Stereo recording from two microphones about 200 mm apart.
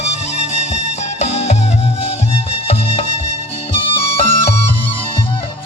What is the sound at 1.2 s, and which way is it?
Music, 35° left (ahead or behind).